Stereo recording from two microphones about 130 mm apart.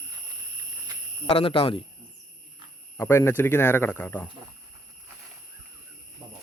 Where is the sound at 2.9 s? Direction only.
20° left (ahead or behind).